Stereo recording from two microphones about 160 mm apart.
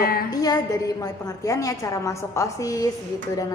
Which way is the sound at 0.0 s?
65° left (ahead or behind).